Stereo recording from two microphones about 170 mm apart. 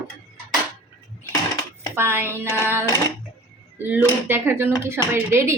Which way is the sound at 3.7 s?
10° right (ahead or behind).